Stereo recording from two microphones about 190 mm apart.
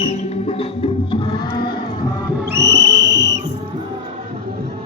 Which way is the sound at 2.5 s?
60° right (ahead or behind).